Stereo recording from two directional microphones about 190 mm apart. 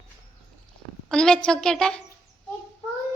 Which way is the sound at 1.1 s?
5° left (ahead or behind).